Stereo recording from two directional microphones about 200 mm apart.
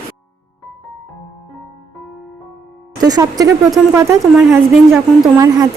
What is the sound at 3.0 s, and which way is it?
A woman's voice, 20° right (ahead or behind).